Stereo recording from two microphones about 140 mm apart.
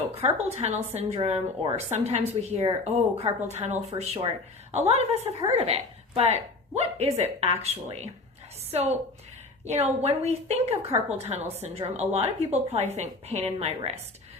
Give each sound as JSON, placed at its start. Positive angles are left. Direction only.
{"t": 0.1, "sound": "a woman's voice", "side_deg": -45}
{"t": 9.6, "sound": "a woman's voice", "side_deg": -50}